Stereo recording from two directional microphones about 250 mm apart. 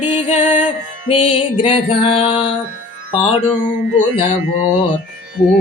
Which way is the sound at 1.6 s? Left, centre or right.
Left.